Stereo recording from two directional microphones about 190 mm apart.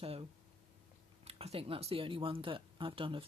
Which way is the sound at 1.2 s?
30° right (ahead or behind).